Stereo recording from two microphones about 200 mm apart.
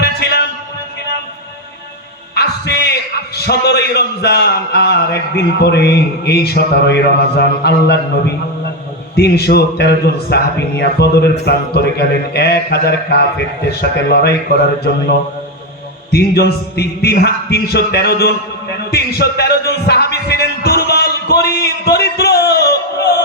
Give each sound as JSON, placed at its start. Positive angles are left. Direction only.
{"t": 0.0, "sound": "a sound", "side_deg": 55}
{"t": 2.3, "sound": "a man's voice", "side_deg": 55}
{"t": 9.1, "sound": "a man's voice", "side_deg": 55}
{"t": 16.1, "sound": "speech", "side_deg": 55}
{"t": 18.9, "sound": "music", "side_deg": 55}